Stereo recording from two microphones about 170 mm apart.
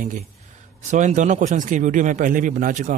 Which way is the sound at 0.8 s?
45° right (ahead or behind).